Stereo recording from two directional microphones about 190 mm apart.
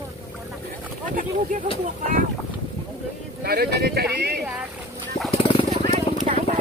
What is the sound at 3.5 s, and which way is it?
Speech, 55° right (ahead or behind).